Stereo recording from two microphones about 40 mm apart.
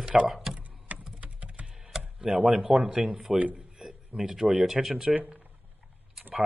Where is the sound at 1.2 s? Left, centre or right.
Right.